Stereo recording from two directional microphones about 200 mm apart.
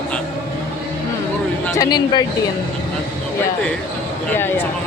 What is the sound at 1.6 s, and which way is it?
Speech, 15° left (ahead or behind).